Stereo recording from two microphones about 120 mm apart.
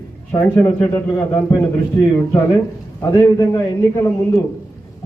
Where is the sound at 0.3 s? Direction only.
20° left (ahead or behind).